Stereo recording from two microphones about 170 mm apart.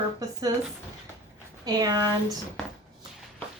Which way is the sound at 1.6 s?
20° right (ahead or behind).